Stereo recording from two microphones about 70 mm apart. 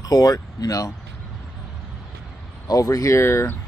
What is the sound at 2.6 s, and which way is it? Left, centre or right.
Speech, left.